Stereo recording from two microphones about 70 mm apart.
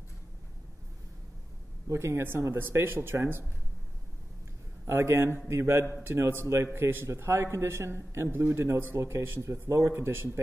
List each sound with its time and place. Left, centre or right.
1.9 s speech: right
4.8 s speech: right